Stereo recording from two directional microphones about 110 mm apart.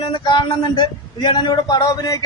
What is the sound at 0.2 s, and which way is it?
A man's voice, 45° left (ahead or behind).